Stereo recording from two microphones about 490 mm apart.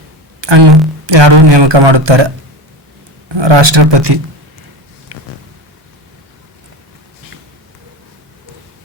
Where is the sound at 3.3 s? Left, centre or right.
Right.